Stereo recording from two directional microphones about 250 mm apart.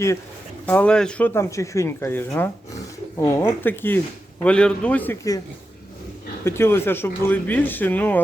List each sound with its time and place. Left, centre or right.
0.6 s a man's voice: centre
6.4 s speech: centre